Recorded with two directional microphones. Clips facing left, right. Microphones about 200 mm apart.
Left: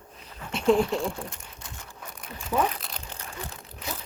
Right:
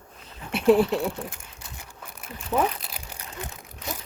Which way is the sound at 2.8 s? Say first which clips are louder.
Even; 5° right (ahead or behind).